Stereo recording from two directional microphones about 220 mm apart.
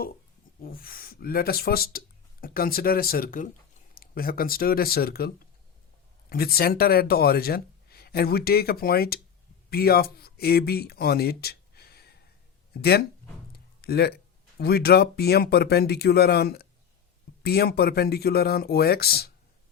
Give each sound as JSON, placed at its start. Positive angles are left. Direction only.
{"t": 0.6, "sound": "speech", "side_deg": 40}
{"t": 6.3, "sound": "speech", "side_deg": 45}